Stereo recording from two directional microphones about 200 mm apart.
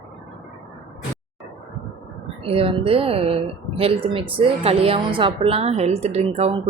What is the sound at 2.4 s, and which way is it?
A woman's voice, 30° right (ahead or behind).